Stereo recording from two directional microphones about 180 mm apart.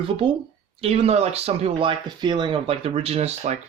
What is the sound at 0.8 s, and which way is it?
Speech, 35° right (ahead or behind).